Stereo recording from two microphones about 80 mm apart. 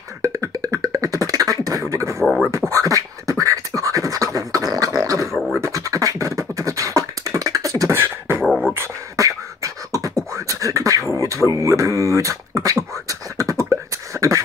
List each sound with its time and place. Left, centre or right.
0.2 s beatboxing: right
5.3 s beatboxing: centre
5.6 s beatboxing: right
7.9 s beatboxing: right
8.5 s beatboxing: centre
9.1 s beatboxing: right
11.1 s a sound: right
12.6 s beatboxing: right